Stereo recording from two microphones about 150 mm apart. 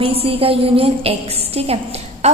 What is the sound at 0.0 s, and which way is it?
A woman's voice, 40° right (ahead or behind).